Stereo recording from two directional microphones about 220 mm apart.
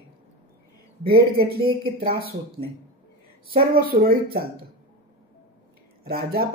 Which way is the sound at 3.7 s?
40° right (ahead or behind).